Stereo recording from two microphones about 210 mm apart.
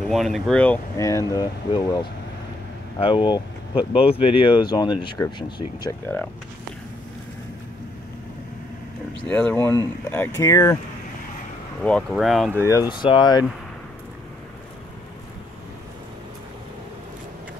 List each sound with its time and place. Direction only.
0.1 s speech: centre (ahead or behind)
9.3 s speech: 10° left (ahead or behind)
11.8 s speech: 5° left (ahead or behind)
12.6 s speech: 15° left (ahead or behind)